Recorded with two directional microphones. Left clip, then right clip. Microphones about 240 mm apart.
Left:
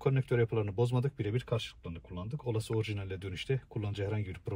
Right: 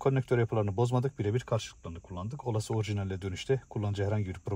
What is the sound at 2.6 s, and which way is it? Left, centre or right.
Speech, right.